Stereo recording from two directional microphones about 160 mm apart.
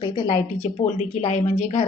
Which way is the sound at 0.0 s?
30° left (ahead or behind).